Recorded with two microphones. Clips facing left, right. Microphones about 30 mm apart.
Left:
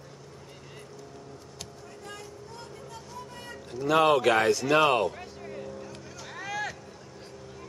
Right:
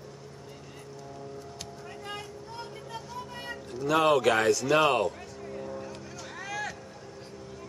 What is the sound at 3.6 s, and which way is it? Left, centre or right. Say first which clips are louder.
Speech: left 2 dB; centre.